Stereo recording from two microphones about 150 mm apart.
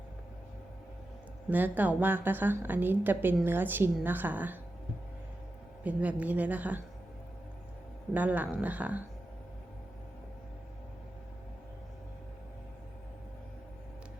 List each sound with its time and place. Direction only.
1.5 s a woman's voice: 10° right (ahead or behind)
5.8 s a woman's voice: 10° right (ahead or behind)
8.1 s a woman's voice: 10° right (ahead or behind)